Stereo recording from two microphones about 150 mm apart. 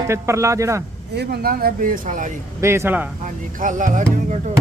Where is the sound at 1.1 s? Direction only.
90° right; by 2.3 s 60° right (ahead or behind).